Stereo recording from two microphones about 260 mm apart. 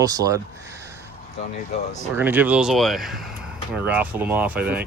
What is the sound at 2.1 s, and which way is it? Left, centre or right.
Speech, centre.